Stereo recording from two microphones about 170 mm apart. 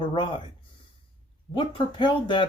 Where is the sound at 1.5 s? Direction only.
30° left (ahead or behind).